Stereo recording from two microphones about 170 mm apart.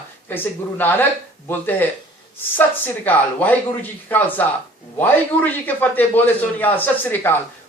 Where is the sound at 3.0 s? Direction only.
10° left (ahead or behind).